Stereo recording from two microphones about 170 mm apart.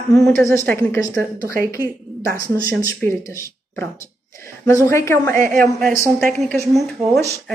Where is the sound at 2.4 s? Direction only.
20° left (ahead or behind).